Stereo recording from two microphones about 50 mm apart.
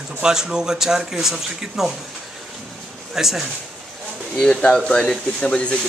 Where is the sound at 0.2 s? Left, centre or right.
Centre.